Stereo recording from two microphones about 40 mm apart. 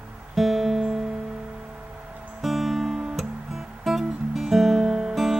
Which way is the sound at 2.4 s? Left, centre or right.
Centre.